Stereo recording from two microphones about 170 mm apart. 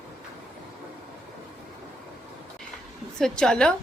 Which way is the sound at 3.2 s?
5° left (ahead or behind).